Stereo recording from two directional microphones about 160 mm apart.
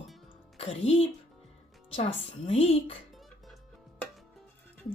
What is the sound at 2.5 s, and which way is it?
Speech, 40° left (ahead or behind).